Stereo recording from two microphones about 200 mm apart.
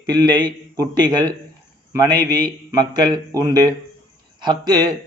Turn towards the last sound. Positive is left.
turn(degrees=-20)  # may be behind; listen again after turning